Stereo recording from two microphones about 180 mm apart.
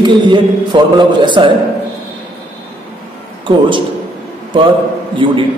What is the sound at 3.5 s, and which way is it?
Speech, 30° right (ahead or behind).